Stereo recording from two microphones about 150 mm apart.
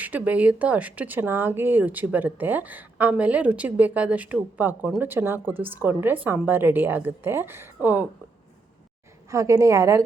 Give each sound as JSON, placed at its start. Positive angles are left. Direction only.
{"t": 0.0, "sound": "speech", "side_deg": -10}
{"t": 9.3, "sound": "a woman's voice", "side_deg": -20}